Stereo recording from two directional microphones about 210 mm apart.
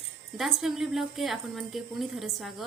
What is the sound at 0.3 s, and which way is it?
Speech, centre (ahead or behind).